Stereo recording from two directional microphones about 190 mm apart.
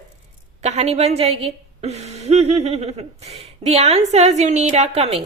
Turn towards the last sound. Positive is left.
turn(degrees=-30)  # may be behind; listen again after turning